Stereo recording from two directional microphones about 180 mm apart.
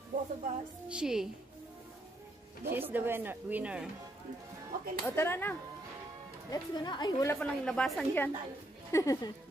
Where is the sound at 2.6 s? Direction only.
10° right (ahead or behind).